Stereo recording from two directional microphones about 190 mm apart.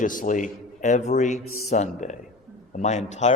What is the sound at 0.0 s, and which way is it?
A man's voice, 45° left (ahead or behind).